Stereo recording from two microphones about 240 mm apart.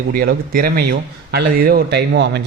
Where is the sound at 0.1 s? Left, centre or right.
Right.